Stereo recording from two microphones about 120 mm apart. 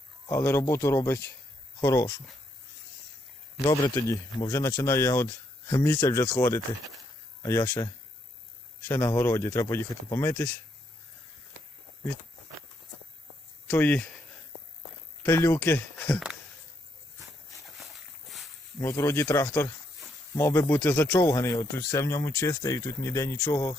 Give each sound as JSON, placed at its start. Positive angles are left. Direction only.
{"t": 0.3, "sound": "speech", "side_deg": 20}
{"t": 3.6, "sound": "speech", "side_deg": 35}
{"t": 7.4, "sound": "speech", "side_deg": 20}
{"t": 9.0, "sound": "speech", "side_deg": 20}
{"t": 13.7, "sound": "speech", "side_deg": 15}
{"t": 15.2, "sound": "speech", "side_deg": 20}
{"t": 18.3, "sound": "a sound", "side_deg": 0}
{"t": 18.8, "sound": "speech", "side_deg": 25}